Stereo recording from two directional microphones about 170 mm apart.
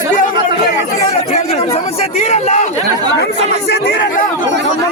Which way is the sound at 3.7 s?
70° left (ahead or behind).